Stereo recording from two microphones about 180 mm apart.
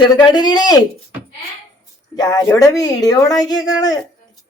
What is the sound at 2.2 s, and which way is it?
A woman's voice, 20° left (ahead or behind).